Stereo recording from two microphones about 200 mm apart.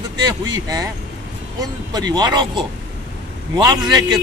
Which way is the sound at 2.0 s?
20° right (ahead or behind).